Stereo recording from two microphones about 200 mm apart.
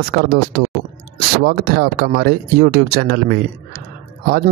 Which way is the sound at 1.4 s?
55° right (ahead or behind).